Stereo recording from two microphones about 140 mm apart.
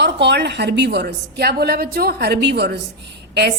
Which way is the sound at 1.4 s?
90° right.